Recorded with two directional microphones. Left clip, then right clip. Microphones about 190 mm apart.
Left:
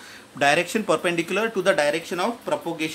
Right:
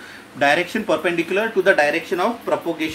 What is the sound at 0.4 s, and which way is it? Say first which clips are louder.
Speech: right 2 dB; 40° left (ahead or behind).